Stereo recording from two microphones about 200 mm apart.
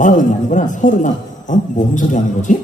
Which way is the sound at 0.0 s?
40° left (ahead or behind).